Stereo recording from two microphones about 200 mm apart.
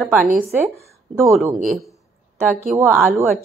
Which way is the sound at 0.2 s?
45° right (ahead or behind).